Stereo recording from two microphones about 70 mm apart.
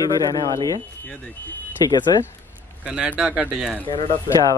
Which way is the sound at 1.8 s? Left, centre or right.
Left.